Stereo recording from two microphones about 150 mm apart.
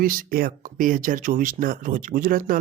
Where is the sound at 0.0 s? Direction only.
70° right (ahead or behind).